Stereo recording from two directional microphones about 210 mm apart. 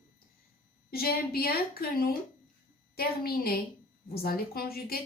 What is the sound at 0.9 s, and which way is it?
Speech, 45° left (ahead or behind).